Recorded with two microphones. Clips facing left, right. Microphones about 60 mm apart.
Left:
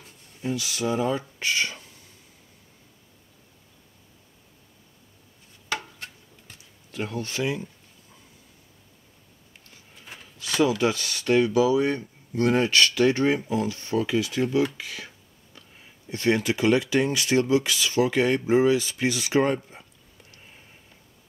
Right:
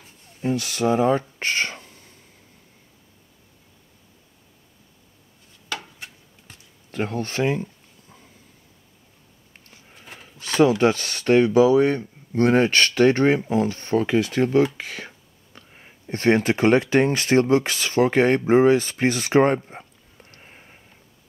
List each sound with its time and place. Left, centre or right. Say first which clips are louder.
0.4 s speech: right 5 dB; right
6.9 s speech: right 4 dB; right
10.4 s speech: right 5 dB; right